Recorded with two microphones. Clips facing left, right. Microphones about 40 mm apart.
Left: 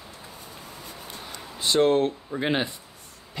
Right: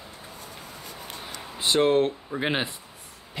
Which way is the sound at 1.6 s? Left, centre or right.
Centre.